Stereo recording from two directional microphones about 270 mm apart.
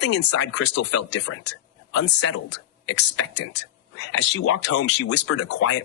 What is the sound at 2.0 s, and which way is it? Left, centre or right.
Speech, left.